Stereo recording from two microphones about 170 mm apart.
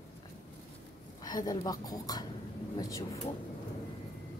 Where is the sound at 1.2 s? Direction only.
25° left (ahead or behind).